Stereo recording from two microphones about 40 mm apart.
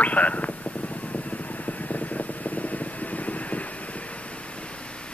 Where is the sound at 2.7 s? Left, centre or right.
Left.